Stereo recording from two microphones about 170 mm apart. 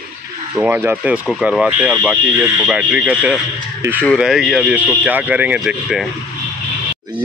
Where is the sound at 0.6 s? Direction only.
10° right (ahead or behind).